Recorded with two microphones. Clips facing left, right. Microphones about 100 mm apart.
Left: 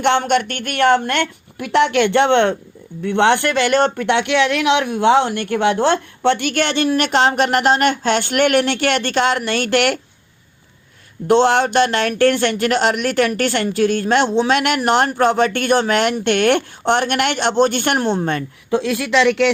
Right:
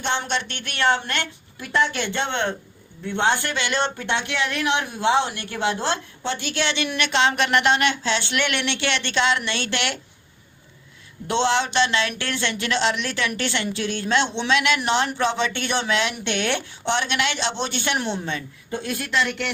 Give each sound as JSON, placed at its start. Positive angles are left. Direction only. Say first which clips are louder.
{"t": 0.0, "sound": "speech", "louder": "left 10 dB", "side_deg": 60}
{"t": 11.3, "sound": "speech", "louder": "left 8 dB", "side_deg": 50}
{"t": 18.7, "sound": "speech", "louder": "left 9 dB", "side_deg": 90}